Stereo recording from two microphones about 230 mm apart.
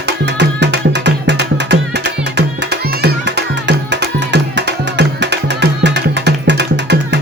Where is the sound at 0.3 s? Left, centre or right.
Right.